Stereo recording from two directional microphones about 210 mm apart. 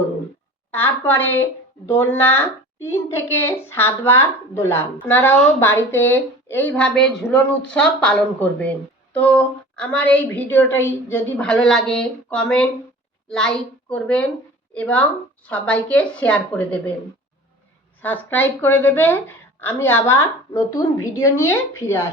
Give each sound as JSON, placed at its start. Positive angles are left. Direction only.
{"t": 1.0, "sound": "a woman's voice", "side_deg": 10}
{"t": 18.0, "sound": "a woman's voice", "side_deg": 10}